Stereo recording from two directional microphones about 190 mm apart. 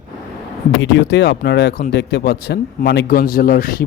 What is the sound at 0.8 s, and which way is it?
Speech, 70° left (ahead or behind).